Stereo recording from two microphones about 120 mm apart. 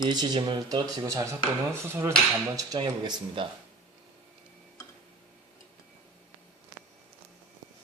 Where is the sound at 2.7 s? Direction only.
40° right (ahead or behind).